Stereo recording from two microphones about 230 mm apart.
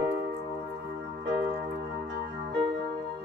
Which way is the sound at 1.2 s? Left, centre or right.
Right.